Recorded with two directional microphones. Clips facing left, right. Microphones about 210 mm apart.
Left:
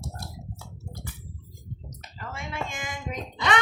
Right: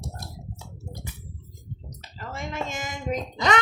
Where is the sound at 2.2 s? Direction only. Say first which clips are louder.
Right 2 dB; 40° right (ahead or behind).